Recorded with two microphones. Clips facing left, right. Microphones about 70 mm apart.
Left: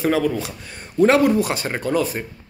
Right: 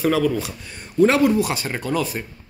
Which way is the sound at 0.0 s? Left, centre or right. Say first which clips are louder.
Even; left.